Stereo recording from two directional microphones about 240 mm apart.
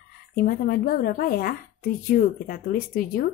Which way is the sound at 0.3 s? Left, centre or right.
Left.